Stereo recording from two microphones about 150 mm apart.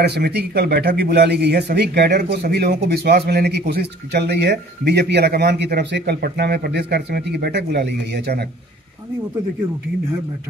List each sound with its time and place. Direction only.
0.0 s speech: 90° right